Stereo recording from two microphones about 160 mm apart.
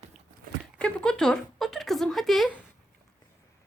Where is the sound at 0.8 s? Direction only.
5° left (ahead or behind).